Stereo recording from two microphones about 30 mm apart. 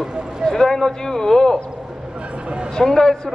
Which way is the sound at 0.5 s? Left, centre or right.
Centre.